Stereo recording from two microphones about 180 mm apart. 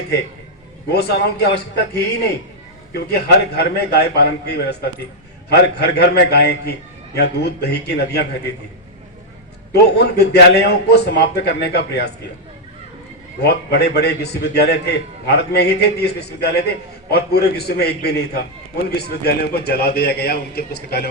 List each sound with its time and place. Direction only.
0.9 s a man's voice: 60° left (ahead or behind)
9.8 s a man's voice: 65° left (ahead or behind)
13.4 s a man's voice: 65° left (ahead or behind)